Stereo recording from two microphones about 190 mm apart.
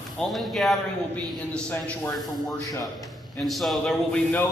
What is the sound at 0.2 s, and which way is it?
A man's voice, centre (ahead or behind).